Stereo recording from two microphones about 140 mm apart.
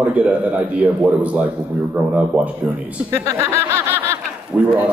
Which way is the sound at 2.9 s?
15° right (ahead or behind).